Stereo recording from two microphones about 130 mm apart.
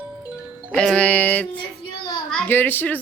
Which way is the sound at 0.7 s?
5° left (ahead or behind).